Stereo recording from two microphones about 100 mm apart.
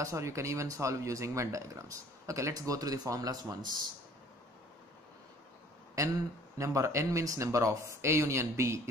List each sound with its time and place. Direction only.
0.0 s speech: 30° right (ahead or behind)
6.6 s speech: 30° right (ahead or behind)